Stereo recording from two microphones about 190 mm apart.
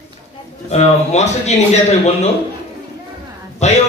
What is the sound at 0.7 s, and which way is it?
Speech, 35° left (ahead or behind).